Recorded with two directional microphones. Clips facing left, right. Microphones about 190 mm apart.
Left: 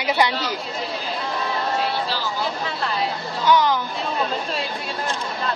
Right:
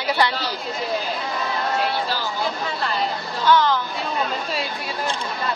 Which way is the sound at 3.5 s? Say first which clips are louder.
Even; 15° left (ahead or behind).